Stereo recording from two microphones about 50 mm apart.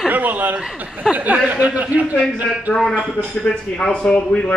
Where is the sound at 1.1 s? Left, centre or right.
Right.